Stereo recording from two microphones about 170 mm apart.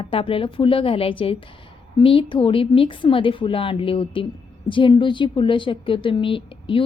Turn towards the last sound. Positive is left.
turn(degrees=30)  # may be behind; listen again after turning